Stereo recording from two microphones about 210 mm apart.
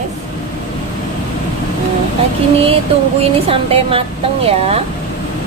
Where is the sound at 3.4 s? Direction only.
25° right (ahead or behind).